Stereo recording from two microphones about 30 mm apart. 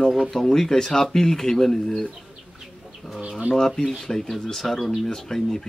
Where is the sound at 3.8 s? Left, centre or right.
Centre.